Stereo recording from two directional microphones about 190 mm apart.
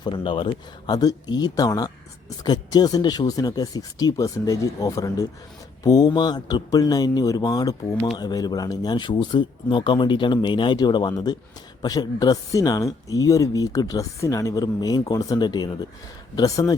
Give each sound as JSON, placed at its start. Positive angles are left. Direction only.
{"t": 0.0, "sound": "speech", "side_deg": 25}